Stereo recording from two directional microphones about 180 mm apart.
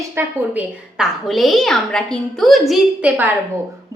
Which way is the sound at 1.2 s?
Centre (ahead or behind).